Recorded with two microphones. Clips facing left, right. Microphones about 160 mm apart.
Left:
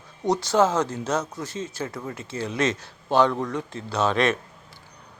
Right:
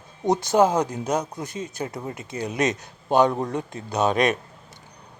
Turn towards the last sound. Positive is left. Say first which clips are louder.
# right 1 dB
turn(degrees=-15)  # may be behind; listen again after turning